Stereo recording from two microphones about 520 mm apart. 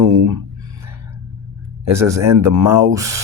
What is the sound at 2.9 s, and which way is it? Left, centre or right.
Speech, centre.